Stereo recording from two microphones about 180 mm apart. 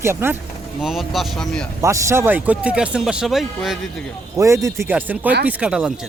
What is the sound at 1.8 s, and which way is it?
Speech, 15° right (ahead or behind).